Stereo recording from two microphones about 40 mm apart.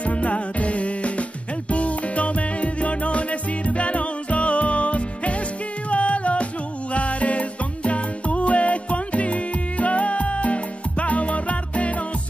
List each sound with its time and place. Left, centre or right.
0.0 s music: left